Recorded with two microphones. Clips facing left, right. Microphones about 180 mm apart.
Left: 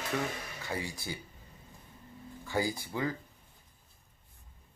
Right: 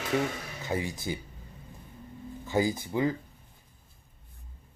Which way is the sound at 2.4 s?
20° right (ahead or behind).